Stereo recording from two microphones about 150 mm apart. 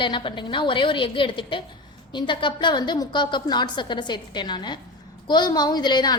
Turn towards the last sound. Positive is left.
turn(degrees=30)  # may be behind; listen again after turning